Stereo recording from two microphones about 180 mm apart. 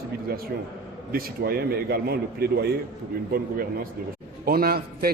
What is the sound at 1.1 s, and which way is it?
A man's voice, 60° right (ahead or behind).